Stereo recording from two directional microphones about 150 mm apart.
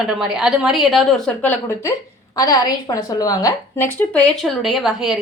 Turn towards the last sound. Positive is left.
turn(degrees=0)  # may be behind; listen again after turning